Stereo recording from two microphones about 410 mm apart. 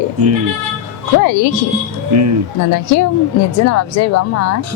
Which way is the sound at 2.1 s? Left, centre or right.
Right.